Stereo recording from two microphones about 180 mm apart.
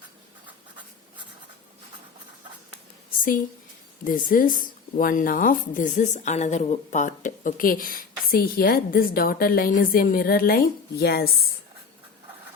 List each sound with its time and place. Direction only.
4.0 s a woman's voice: 50° left (ahead or behind)